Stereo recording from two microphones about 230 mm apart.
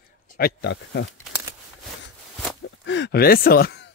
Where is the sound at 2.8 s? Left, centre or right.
Left.